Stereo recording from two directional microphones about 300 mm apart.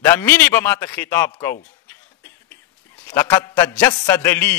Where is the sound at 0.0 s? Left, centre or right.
Centre.